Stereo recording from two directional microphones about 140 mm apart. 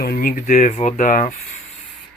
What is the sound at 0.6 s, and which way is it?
Speech, 55° left (ahead or behind).